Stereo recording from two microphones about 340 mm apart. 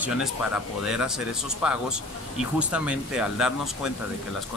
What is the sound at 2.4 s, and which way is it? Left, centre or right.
Speech, centre.